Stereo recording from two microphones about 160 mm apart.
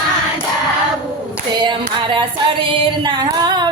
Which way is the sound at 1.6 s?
30° right (ahead or behind).